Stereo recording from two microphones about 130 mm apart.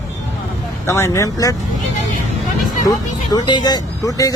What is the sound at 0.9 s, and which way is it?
Speech, 25° left (ahead or behind).